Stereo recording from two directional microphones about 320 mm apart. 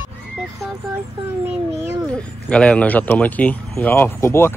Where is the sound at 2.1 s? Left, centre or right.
Centre.